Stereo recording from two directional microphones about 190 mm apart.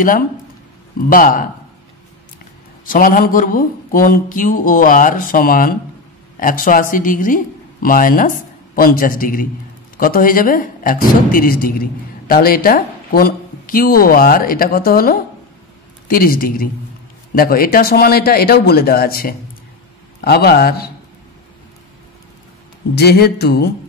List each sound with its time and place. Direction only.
1.1 s speech: 45° left (ahead or behind)
2.8 s speech: 45° left (ahead or behind)
22.9 s speech: 55° left (ahead or behind)